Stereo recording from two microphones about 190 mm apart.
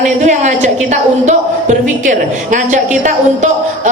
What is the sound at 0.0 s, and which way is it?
Speech, 40° right (ahead or behind).